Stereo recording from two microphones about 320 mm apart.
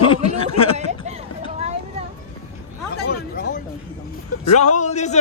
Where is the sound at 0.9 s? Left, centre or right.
Centre.